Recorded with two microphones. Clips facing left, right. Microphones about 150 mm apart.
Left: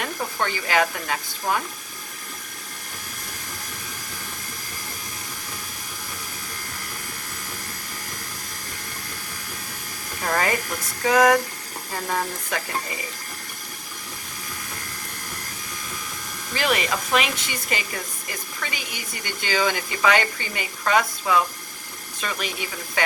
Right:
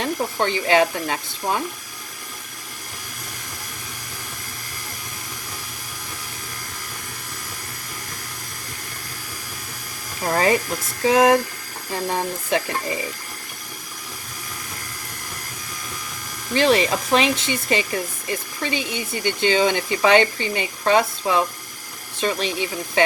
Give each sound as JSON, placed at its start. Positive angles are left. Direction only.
{"t": 0.0, "sound": "speech", "side_deg": -25}
{"t": 10.3, "sound": "speech", "side_deg": -25}
{"t": 16.6, "sound": "speech", "side_deg": -30}